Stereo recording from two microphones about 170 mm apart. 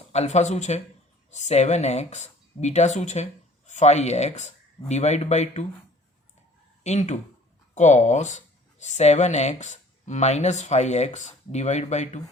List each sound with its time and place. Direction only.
0.1 s speech: 40° left (ahead or behind)
6.8 s speech: 45° left (ahead or behind)